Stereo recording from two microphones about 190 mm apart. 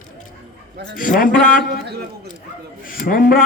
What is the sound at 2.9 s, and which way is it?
Speech, 50° left (ahead or behind).